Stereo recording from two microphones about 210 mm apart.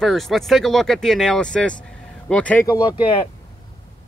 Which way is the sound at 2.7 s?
20° left (ahead or behind).